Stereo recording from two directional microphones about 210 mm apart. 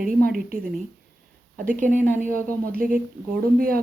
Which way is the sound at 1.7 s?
40° right (ahead or behind).